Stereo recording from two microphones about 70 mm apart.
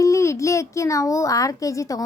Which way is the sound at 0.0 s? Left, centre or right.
Left.